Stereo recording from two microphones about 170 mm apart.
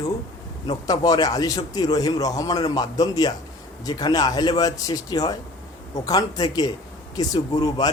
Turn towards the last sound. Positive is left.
turn(degrees=20)  # may be behind; listen again after turning